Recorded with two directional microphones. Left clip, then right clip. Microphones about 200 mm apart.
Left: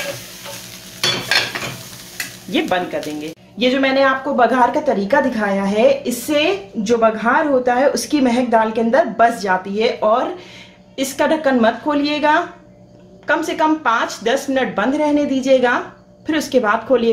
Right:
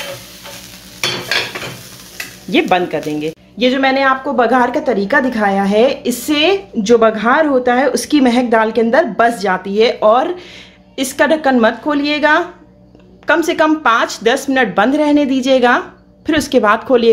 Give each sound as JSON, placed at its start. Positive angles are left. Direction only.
{"t": 2.7, "sound": "speech", "side_deg": -45}
{"t": 3.5, "sound": "a woman's voice", "side_deg": -30}
{"t": 13.3, "sound": "speech", "side_deg": -40}